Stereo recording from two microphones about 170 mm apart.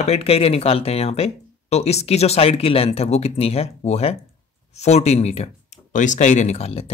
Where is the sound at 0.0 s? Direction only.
35° left (ahead or behind).